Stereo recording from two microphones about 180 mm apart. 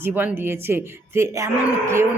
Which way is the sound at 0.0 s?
10° right (ahead or behind).